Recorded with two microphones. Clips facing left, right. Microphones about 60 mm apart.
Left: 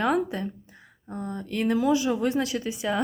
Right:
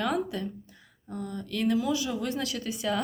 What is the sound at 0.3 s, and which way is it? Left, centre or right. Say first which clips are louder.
A woman's voice: left 2 dB; left.